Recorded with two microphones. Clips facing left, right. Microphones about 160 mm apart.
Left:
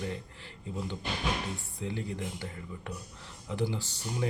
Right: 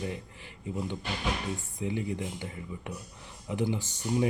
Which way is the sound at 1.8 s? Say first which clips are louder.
Right 4 dB; 15° right (ahead or behind).